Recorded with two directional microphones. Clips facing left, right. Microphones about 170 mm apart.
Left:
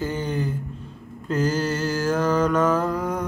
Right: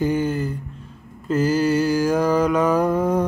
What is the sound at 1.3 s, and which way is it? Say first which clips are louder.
Mantra: right 5 dB; 10° right (ahead or behind).